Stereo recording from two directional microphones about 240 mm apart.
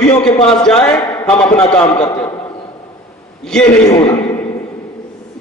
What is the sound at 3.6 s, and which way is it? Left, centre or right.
Speech, left.